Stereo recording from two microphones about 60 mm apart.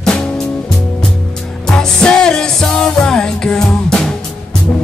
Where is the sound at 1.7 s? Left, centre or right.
Centre.